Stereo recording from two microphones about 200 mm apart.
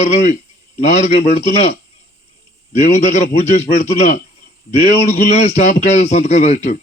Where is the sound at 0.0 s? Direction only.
35° left (ahead or behind).